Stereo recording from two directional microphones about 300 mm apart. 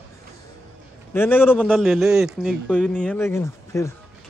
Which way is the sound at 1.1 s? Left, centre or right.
Centre.